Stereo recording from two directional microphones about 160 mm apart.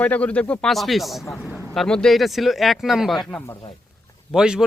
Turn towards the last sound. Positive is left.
turn(degrees=-5)  # may be behind; listen again after turning